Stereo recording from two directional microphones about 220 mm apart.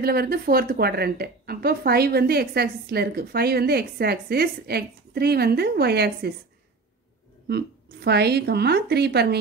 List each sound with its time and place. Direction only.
0.0 s a woman's voice: 45° right (ahead or behind)
7.4 s a woman's voice: 50° right (ahead or behind)